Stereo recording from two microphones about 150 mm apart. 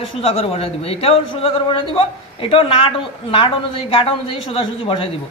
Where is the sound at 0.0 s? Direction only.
40° left (ahead or behind).